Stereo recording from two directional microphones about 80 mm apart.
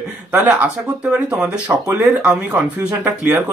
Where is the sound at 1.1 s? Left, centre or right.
Centre.